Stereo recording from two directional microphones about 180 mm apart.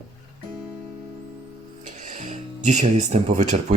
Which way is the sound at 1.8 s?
45° right (ahead or behind).